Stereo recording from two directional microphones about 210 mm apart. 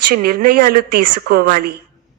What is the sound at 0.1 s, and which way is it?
Speech, 45° right (ahead or behind).